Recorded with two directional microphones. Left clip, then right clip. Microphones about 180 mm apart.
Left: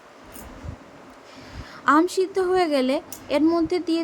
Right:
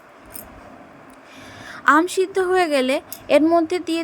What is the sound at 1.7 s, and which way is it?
A woman's voice, 30° right (ahead or behind).